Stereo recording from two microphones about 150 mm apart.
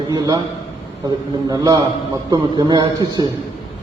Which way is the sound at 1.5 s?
25° right (ahead or behind).